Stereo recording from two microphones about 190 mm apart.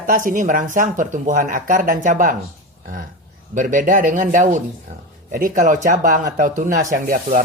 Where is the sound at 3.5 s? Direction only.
45° right (ahead or behind).